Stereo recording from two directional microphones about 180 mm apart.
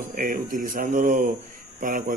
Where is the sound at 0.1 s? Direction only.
50° right (ahead or behind).